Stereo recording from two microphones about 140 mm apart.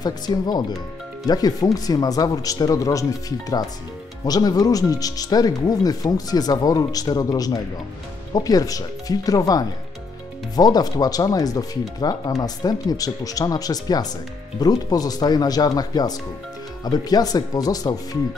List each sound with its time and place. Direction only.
0.0 s speech: 30° left (ahead or behind)